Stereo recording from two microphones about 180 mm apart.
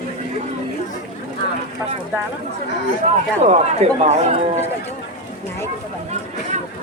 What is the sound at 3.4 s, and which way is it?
Speech, 40° right (ahead or behind).